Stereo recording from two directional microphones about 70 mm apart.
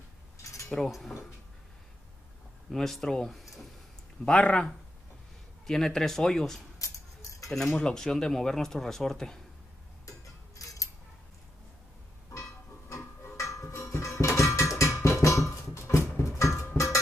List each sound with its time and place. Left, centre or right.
0.4 s a sound: left
0.7 s speech: centre
2.7 s speech: centre
4.2 s speech: centre
6.8 s a sound: left
7.4 s cutlery: centre
7.7 s speech: centre
10.6 s music: left
12.9 s a sound: left
16.2 s music: left